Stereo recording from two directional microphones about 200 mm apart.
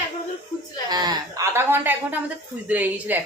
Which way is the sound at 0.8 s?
20° right (ahead or behind).